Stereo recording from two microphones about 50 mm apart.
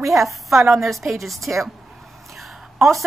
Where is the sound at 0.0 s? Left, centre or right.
Right.